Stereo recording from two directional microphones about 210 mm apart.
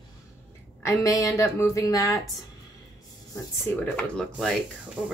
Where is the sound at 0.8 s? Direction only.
15° left (ahead or behind).